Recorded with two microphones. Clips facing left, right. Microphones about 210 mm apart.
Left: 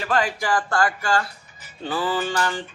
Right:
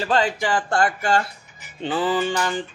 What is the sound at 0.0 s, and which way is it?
Speech, 25° right (ahead or behind).